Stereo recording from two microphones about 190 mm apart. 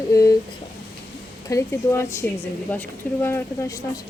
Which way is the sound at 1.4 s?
15° left (ahead or behind).